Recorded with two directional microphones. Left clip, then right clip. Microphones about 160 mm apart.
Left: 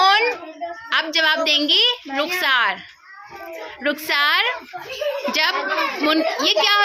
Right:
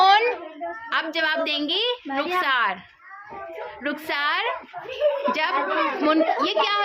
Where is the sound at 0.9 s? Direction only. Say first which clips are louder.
Left 6 dB; 15° left (ahead or behind).